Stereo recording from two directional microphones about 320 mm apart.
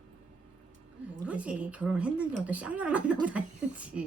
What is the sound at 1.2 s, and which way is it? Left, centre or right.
A woman's voice, centre.